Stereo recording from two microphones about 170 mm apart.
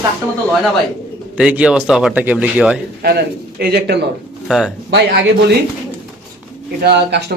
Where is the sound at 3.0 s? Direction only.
70° right (ahead or behind).